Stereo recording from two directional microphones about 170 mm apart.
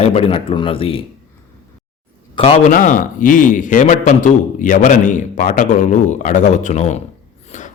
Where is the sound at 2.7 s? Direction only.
50° left (ahead or behind).